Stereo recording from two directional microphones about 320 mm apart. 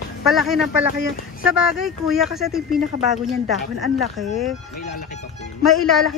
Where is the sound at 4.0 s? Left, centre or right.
Centre.